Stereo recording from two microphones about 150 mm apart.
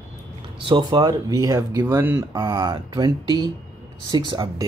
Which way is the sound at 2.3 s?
30° right (ahead or behind).